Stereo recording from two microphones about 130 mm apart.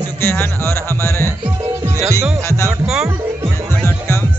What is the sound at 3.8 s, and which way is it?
Music, 20° left (ahead or behind).